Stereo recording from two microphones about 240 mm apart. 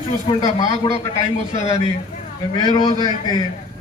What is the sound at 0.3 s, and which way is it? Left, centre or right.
Speech, centre.